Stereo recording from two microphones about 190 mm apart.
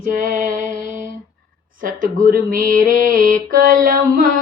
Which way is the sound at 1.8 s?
45° right (ahead or behind).